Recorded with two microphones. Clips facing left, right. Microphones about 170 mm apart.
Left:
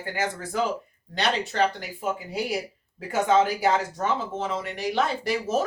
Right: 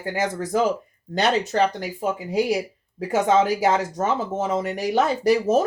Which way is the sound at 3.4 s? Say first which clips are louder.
Right 3 dB; 40° right (ahead or behind).